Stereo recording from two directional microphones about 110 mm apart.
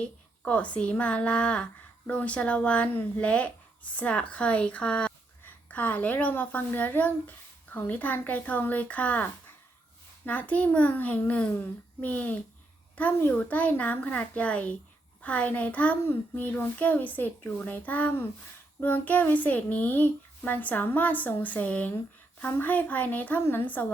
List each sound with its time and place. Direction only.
0.0 s speech: 10° left (ahead or behind)
10.2 s speech: 15° left (ahead or behind)